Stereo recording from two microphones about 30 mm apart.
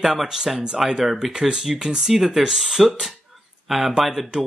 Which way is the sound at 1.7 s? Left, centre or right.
Right.